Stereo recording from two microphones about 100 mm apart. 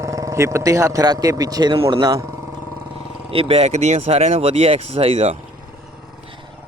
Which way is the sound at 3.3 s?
80° right.